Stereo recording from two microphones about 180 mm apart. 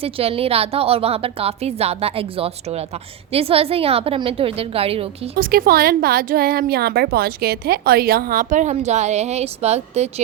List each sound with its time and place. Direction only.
0.0 s a woman's voice: 35° right (ahead or behind)
5.4 s speech: 55° right (ahead or behind); by 10.2 s 35° right (ahead or behind)